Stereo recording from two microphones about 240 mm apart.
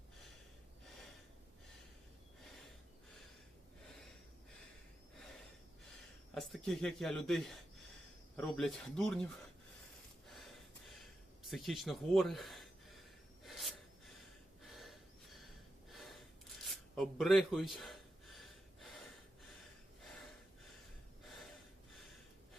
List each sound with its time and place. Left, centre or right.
6.0 s speech: centre
10.2 s gasp: centre
13.4 s a sound: centre
14.6 s gasp: centre